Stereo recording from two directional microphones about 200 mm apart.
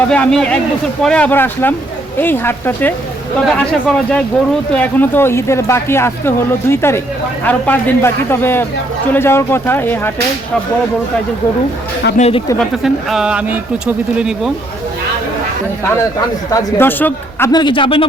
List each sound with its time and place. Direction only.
0.1 s speech: 5° left (ahead or behind)
12.1 s speech: 30° left (ahead or behind)
12.5 s speech: centre (ahead or behind)
16.5 s speech: 15° left (ahead or behind)